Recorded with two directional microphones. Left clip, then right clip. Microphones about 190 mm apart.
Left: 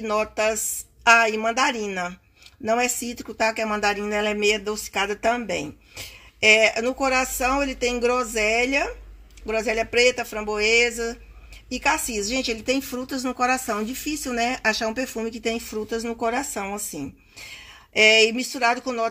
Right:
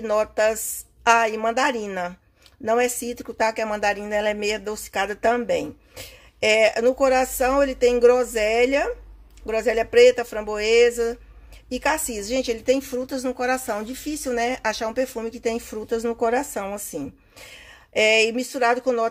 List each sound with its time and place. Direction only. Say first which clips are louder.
0.0 s speech: right 2 dB; 15° right (ahead or behind)
17.0 s a sound: even; 15° right (ahead or behind)
18.1 s speech: left 1 dB; 15° right (ahead or behind)